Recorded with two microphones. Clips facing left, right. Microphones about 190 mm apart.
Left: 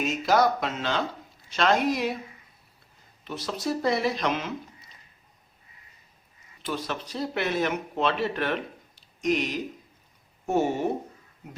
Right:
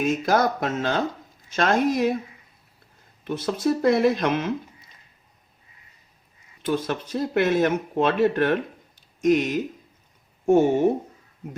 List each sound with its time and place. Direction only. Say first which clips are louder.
0.0 s speech: right 2 dB; 50° right (ahead or behind)
3.2 s speech: right 7 dB; 55° right (ahead or behind)
6.6 s speech: right 6 dB; 50° right (ahead or behind)